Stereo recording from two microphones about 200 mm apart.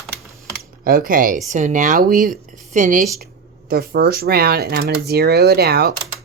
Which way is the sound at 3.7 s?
50° right (ahead or behind).